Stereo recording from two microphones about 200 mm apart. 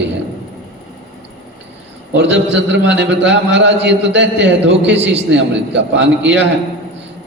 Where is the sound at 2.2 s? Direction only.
60° right (ahead or behind).